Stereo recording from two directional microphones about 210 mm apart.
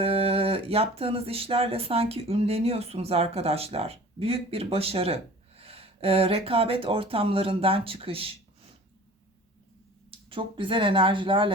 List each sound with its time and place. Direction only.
0.0 s speech: 30° right (ahead or behind)
10.1 s speech: 25° right (ahead or behind)